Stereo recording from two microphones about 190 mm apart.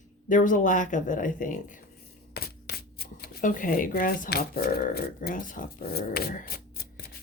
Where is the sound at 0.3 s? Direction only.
45° left (ahead or behind).